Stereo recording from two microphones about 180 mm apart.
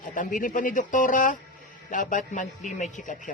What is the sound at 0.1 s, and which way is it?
Speech, 45° left (ahead or behind).